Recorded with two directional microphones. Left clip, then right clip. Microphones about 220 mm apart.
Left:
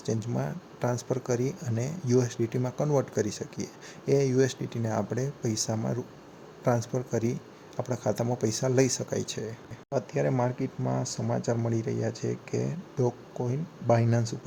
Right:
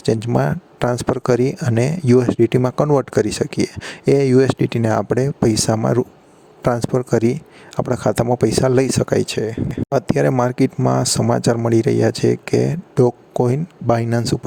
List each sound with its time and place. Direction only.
0.0 s speech: 45° right (ahead or behind)